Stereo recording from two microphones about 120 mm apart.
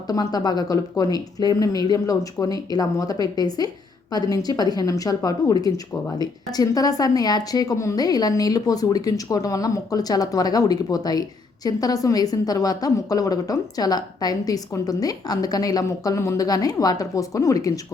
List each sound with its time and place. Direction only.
0.1 s a woman's voice: 35° left (ahead or behind)